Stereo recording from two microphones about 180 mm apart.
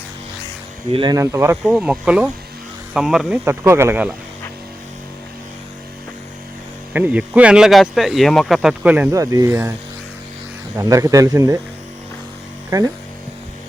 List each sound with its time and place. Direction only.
0.9 s speech: 20° right (ahead or behind)
1.6 s speech: centre (ahead or behind)
3.3 s speech: 15° right (ahead or behind)
6.9 s speech: 10° right (ahead or behind)
9.1 s speech: 20° right (ahead or behind)
10.8 s speech: 20° right (ahead or behind)
12.7 s speech: 20° right (ahead or behind)